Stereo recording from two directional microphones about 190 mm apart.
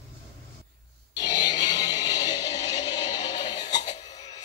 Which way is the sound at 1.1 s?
20° left (ahead or behind).